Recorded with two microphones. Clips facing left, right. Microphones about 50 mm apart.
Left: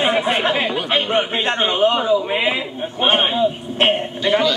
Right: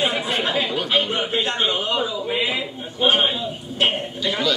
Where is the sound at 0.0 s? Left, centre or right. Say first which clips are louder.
Left 5 dB; left.